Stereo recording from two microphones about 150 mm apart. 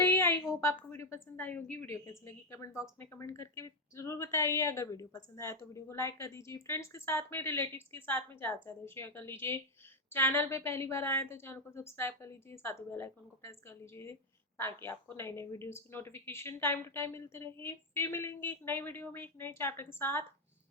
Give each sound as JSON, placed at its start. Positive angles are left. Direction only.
{"t": 0.0, "sound": "a woman's voice", "side_deg": 15}